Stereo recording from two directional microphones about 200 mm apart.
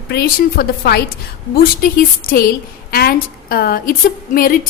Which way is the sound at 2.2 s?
45° left (ahead or behind).